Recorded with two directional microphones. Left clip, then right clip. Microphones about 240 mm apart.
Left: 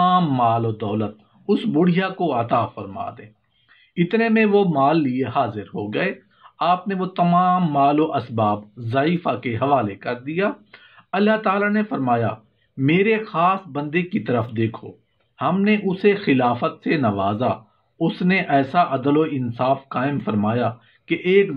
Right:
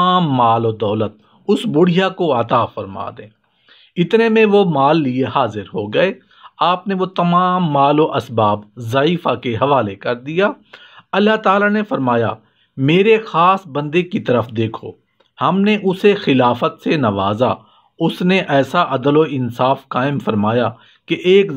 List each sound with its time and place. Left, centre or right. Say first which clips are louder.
0.0 s speech: right 4 dB; right